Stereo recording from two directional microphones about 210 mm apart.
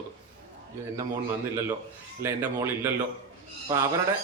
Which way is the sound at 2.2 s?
10° right (ahead or behind).